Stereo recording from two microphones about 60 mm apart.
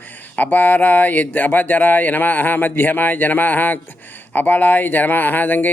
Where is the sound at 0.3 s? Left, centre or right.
Left.